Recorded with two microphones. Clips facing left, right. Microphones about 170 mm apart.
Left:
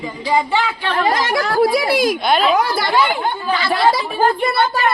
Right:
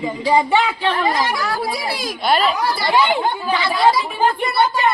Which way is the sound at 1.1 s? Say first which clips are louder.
Left 2 dB; 60° left (ahead or behind).